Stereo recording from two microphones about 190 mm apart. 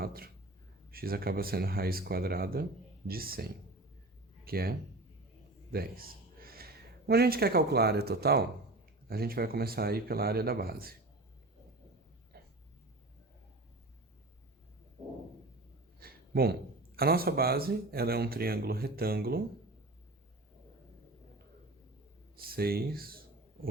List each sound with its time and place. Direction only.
0.0 s a sound: 50° right (ahead or behind)
0.9 s a man's voice: 50° right (ahead or behind)
5.7 s speech: 50° right (ahead or behind)
12.3 s a sound: 55° right (ahead or behind)
16.0 s speech: 55° right (ahead or behind)
22.4 s speech: 50° right (ahead or behind)